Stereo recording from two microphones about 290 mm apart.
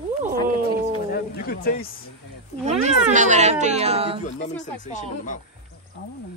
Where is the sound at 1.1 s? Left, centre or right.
Left.